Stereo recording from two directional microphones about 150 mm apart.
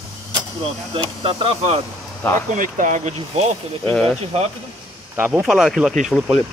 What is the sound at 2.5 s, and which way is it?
Speech, 60° right (ahead or behind).